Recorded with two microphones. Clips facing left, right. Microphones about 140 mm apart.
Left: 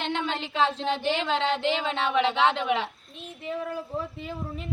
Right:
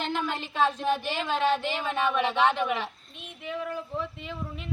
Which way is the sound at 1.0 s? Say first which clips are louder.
Left 1 dB; 20° left (ahead or behind).